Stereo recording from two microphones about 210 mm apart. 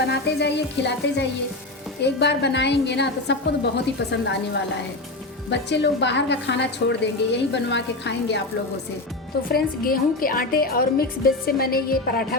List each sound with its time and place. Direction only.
0.1 s a woman's voice: 55° left (ahead or behind)
9.5 s a woman's voice: 45° left (ahead or behind)